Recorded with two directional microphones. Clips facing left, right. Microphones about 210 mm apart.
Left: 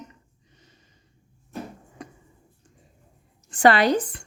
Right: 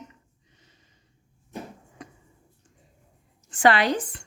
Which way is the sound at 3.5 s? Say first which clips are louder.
Left 3 dB; 40° left (ahead or behind).